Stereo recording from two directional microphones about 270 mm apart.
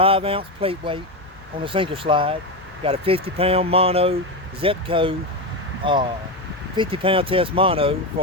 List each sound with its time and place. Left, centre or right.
0.0 s speech: centre